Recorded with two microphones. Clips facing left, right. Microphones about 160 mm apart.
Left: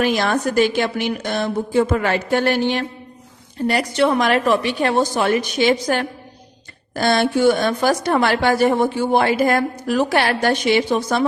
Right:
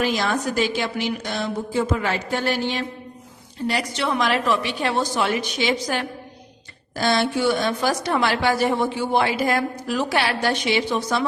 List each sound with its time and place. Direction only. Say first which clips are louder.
0.0 s a woman's voice: left 4 dB; 60° left (ahead or behind)